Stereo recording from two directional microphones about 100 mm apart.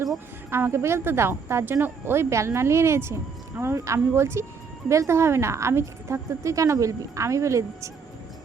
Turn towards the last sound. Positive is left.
turn(degrees=-30)  # may be behind; listen again after turning